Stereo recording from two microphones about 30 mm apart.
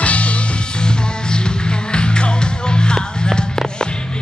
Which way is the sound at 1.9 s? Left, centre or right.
Left.